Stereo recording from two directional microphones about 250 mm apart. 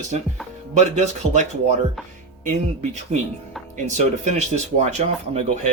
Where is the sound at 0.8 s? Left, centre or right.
Right.